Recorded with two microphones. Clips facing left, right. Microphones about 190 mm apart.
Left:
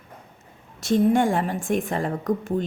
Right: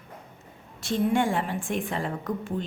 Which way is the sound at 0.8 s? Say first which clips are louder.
Left 5 dB; 40° left (ahead or behind).